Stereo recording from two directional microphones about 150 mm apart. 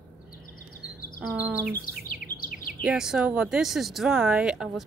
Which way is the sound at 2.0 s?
65° left (ahead or behind).